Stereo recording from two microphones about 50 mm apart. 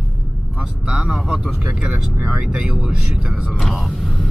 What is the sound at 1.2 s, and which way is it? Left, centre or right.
Speech, centre.